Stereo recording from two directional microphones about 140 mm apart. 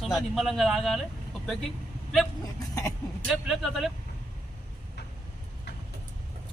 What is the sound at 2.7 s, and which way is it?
Speech, 25° left (ahead or behind).